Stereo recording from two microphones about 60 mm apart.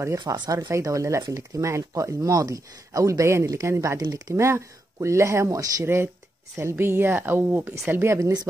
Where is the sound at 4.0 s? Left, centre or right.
Right.